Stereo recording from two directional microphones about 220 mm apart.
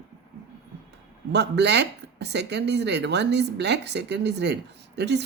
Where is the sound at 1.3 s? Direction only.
50° right (ahead or behind).